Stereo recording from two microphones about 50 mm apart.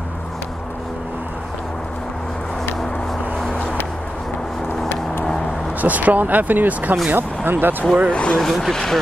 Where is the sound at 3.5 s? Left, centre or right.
Left.